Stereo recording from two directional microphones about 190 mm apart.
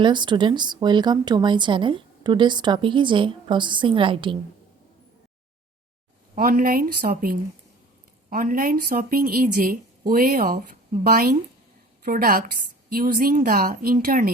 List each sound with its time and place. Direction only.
0.0 s speech: 25° right (ahead or behind)
6.3 s a woman's voice: 50° right (ahead or behind)